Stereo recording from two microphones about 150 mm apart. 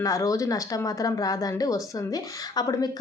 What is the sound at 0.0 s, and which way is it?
Speech, 20° left (ahead or behind).